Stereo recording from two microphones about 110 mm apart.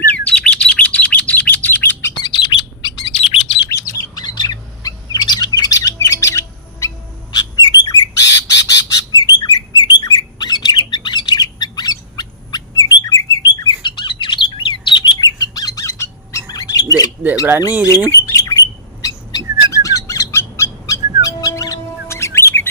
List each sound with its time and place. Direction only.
0.0 s chirp: 15° left (ahead or behind)
2.2 s chirp: 45° left (ahead or behind)
3.7 s bird: 30° left (ahead or behind)
7.3 s bird: 40° left (ahead or behind)
20.1 s owl: 30° left (ahead or behind)